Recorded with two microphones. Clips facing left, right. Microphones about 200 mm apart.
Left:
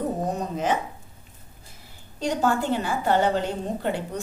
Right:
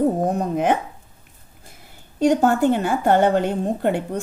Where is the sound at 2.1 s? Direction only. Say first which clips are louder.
Right 7 dB; 55° right (ahead or behind).